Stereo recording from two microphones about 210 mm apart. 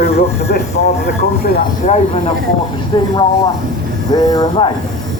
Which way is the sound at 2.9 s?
20° left (ahead or behind).